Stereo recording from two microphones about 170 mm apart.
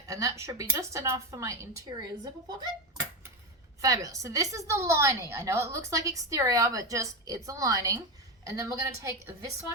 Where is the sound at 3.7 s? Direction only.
20° right (ahead or behind).